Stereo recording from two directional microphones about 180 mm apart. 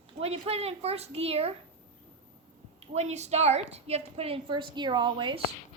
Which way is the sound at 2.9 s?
40° right (ahead or behind).